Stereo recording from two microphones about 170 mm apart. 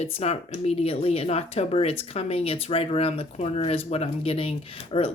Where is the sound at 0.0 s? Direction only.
40° left (ahead or behind).